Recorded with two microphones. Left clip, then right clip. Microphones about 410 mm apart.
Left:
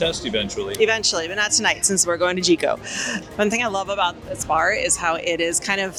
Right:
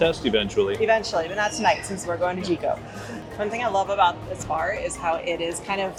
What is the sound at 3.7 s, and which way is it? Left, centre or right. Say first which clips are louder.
Speech: right 2 dB; left.